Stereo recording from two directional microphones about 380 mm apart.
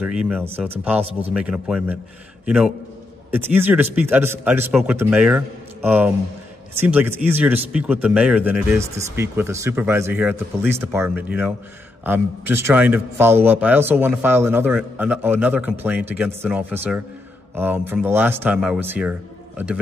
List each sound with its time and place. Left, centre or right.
0.0 s a man's voice: centre